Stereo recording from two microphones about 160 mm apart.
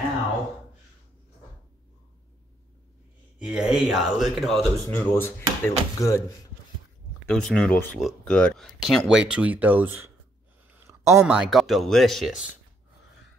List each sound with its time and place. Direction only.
3.3 s speech: 5° right (ahead or behind)
4.8 s speech: 15° left (ahead or behind)
7.2 s speech: 5° left (ahead or behind); by 10.1 s 15° right (ahead or behind)
10.7 s a sound: 15° right (ahead or behind)
11.2 s speech: 5° right (ahead or behind)